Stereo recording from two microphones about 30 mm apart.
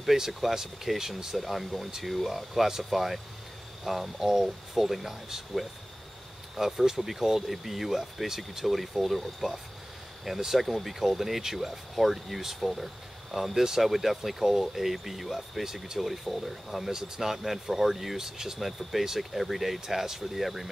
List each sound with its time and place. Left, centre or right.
0.3 s speech: centre
0.9 s speech: centre
1.3 s speech: centre
4.3 s speech: centre
4.8 s speech: centre
10.3 s speech: centre
10.6 s speech: centre
11.0 s speech: centre